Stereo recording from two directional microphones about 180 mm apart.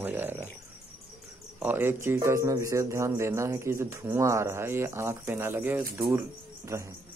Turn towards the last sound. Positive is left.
turn(degrees=-15)  # may be behind; listen again after turning